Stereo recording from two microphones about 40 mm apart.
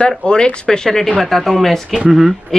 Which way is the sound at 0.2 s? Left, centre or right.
Left.